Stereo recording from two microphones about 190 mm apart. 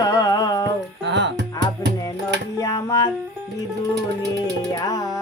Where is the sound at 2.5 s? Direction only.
15° left (ahead or behind).